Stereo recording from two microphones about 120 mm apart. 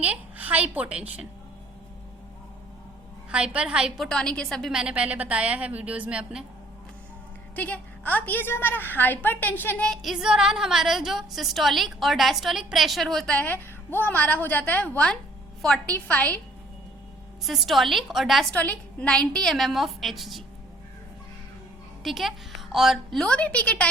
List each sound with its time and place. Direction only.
0.0 s a child's voice: 15° right (ahead or behind)
3.3 s a woman's voice: 10° right (ahead or behind)
4.7 s a woman's voice: 10° right (ahead or behind)
7.5 s a woman's voice: 15° left (ahead or behind)
17.4 s a woman's voice: centre (ahead or behind)
18.5 s a woman's voice: 10° left (ahead or behind)
22.0 s a woman's voice: centre (ahead or behind)